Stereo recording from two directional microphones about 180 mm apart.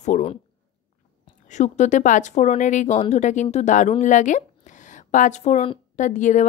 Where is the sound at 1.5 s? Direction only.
40° left (ahead or behind).